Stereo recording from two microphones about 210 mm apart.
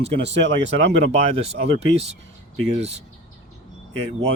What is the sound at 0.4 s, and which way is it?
Speech, 60° right (ahead or behind).